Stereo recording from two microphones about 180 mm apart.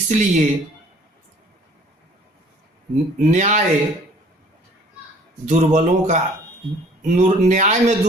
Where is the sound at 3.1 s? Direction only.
45° right (ahead or behind).